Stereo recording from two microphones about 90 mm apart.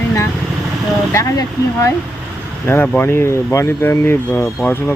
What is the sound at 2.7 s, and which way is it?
Speech, 20° left (ahead or behind).